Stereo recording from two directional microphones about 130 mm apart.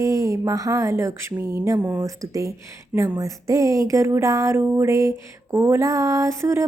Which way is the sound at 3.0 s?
25° right (ahead or behind).